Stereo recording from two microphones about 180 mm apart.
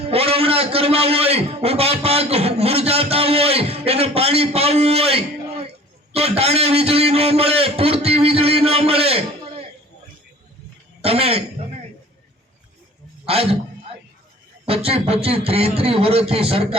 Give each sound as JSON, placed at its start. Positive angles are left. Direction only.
{"t": 0.1, "sound": "a man's voice", "side_deg": -35}
{"t": 11.0, "sound": "a woman's voice", "side_deg": -35}
{"t": 13.2, "sound": "a man's voice", "side_deg": -35}
{"t": 14.7, "sound": "a man's voice", "side_deg": -30}